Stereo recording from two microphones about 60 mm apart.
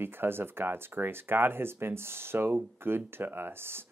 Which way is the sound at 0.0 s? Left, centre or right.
Right.